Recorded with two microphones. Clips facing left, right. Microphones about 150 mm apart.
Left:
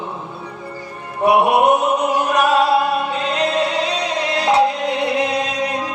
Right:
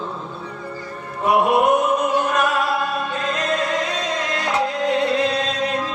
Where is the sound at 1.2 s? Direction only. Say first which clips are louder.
Left 3 dB; 70° left (ahead or behind).